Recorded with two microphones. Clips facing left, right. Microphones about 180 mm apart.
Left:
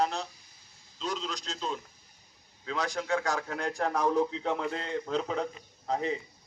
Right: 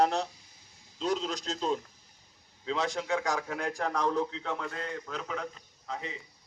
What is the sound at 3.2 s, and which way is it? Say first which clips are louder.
A man's voice: even; 10° right (ahead or behind).